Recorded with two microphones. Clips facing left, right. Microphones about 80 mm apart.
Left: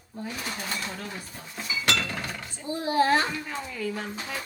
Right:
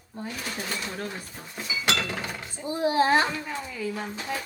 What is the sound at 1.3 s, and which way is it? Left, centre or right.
Dishes, centre.